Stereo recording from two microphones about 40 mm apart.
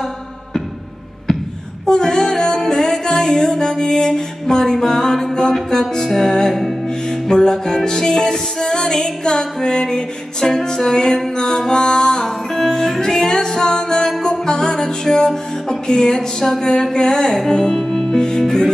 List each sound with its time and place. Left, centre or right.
1.9 s music: centre
7.2 s music: centre